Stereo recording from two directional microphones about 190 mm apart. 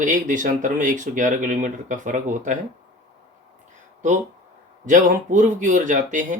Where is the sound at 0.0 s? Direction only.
40° right (ahead or behind).